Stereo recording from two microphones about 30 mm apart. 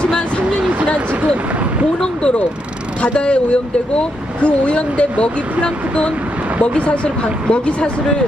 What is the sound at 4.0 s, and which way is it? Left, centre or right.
Speech, left.